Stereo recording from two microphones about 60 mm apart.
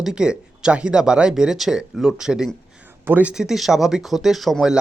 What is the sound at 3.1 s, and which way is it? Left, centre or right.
Speech, right.